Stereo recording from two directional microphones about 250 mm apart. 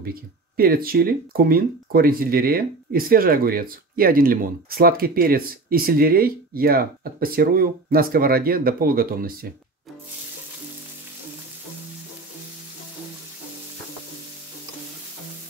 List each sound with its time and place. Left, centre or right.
0.0 s speech: right